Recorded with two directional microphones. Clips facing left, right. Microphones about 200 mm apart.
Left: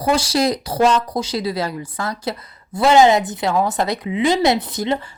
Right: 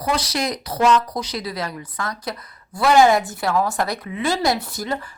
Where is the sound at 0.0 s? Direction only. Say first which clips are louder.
Left 6 dB; 30° left (ahead or behind).